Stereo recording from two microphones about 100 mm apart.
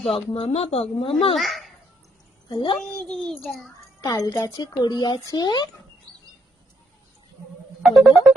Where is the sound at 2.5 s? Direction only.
55° left (ahead or behind).